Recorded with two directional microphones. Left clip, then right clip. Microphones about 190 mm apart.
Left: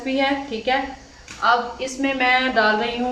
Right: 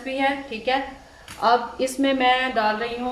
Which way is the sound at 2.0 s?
20° right (ahead or behind).